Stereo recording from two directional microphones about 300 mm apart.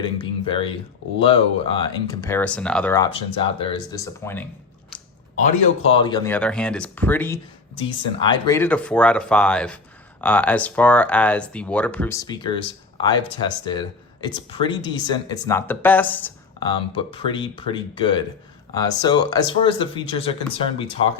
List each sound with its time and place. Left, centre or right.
0.0 s speech: centre
4.9 s a sound: centre
5.4 s speech: centre